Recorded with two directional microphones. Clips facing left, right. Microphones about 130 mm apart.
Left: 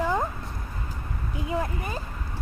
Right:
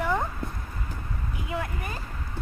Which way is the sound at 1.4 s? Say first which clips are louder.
Left 4 dB; 30° left (ahead or behind).